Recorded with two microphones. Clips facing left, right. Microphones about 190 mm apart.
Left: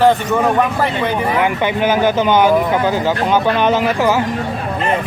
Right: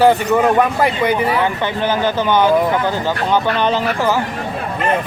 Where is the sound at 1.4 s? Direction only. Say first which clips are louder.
Left 2 dB; 15° left (ahead or behind).